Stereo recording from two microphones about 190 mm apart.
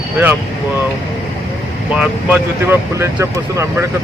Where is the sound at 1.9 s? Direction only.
10° right (ahead or behind).